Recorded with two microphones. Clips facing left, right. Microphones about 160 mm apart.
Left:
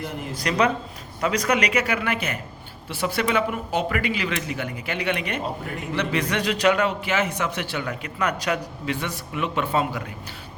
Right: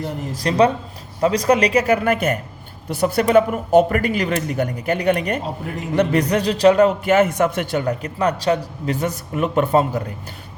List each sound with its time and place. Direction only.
0.0 s a man's voice: 35° right (ahead or behind)